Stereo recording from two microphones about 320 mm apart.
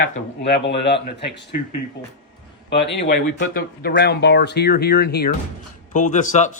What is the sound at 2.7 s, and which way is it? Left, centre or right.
A man's voice, left.